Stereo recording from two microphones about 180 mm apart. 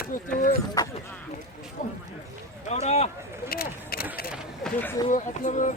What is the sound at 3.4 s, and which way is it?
Vehicle, 55° left (ahead or behind).